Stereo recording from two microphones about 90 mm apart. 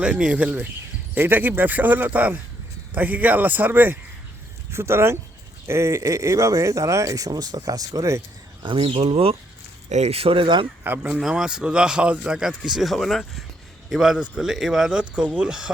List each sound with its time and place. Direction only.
0.0 s a man's voice: 10° right (ahead or behind); by 8.2 s 40° right (ahead or behind)
8.6 s speech: 70° right (ahead or behind)
10.8 s speech: 20° right (ahead or behind)
11.1 s a man's voice: 5° right (ahead or behind)